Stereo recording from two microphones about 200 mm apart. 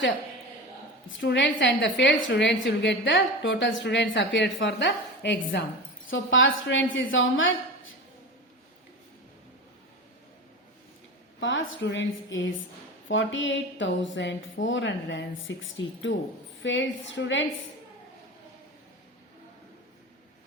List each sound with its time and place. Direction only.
1.0 s a woman's voice: 65° left (ahead or behind)
11.3 s a woman's voice: 70° left (ahead or behind)